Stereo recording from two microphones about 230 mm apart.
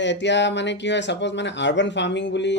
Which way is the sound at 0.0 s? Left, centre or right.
Left.